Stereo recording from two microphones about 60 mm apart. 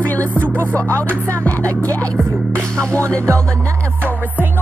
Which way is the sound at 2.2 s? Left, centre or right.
Right.